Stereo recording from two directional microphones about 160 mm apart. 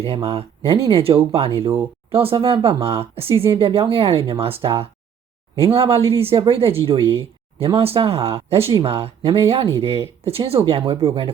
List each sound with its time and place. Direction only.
0.3 s speech: 35° right (ahead or behind)